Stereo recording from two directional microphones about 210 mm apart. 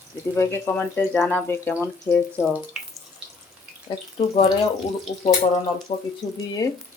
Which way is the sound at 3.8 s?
25° left (ahead or behind).